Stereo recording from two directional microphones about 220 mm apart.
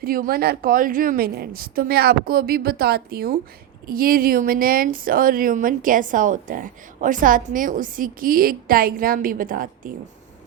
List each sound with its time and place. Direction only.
0.0 s a woman's voice: 45° right (ahead or behind)